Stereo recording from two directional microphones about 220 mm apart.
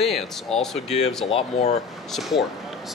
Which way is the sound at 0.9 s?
30° left (ahead or behind).